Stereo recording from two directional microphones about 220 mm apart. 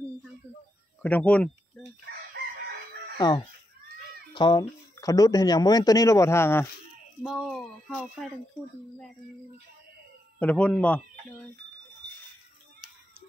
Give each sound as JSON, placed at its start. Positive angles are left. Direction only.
{"t": 1.0, "sound": "speech", "side_deg": 5}
{"t": 3.2, "sound": "speech", "side_deg": 20}
{"t": 7.2, "sound": "speech", "side_deg": 0}
{"t": 10.4, "sound": "speech", "side_deg": 5}